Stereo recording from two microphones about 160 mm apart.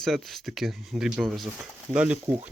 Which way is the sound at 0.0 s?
Centre (ahead or behind).